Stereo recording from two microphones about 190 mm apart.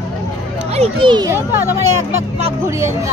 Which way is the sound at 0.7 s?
25° right (ahead or behind).